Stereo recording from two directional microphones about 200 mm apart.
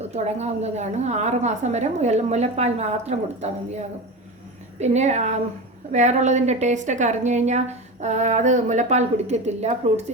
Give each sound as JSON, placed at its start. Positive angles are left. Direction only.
{"t": 0.0, "sound": "a woman's voice", "side_deg": -35}